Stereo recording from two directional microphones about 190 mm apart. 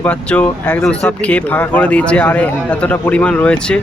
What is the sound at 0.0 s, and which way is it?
Speech, 5° left (ahead or behind).